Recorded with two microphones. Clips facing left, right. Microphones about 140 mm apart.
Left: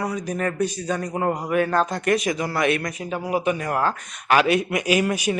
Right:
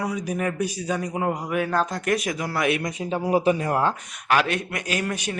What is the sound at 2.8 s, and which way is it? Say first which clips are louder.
Speech: right 2 dB; 25° right (ahead or behind).